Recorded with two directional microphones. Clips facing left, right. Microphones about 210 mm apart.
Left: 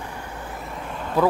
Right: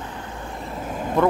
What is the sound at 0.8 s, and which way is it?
Vehicle, 45° right (ahead or behind).